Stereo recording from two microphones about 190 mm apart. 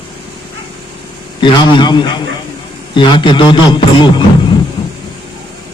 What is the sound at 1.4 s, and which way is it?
A man's voice, 25° left (ahead or behind).